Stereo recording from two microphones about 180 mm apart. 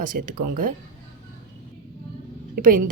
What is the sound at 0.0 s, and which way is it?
Speech, 50° right (ahead or behind).